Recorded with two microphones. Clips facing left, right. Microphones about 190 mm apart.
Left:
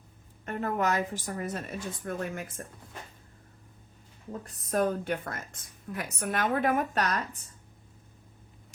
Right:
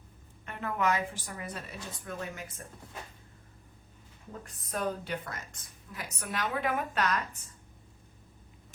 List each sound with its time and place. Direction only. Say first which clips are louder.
0.4 s a woman's voice: left 2 dB; 40° left (ahead or behind)
4.3 s a woman's voice: left 6 dB; 45° left (ahead or behind)